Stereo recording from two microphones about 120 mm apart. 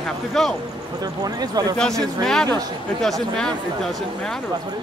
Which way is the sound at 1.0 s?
35° right (ahead or behind).